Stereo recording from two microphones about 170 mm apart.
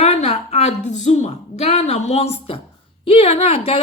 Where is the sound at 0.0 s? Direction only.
40° left (ahead or behind).